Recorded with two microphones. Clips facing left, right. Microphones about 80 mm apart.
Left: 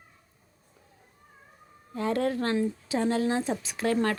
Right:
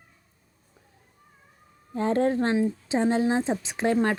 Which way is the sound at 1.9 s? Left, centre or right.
Right.